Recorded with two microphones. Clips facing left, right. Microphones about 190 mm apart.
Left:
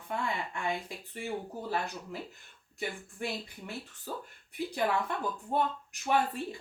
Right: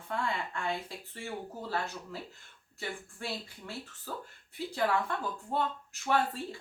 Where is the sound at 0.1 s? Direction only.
15° left (ahead or behind).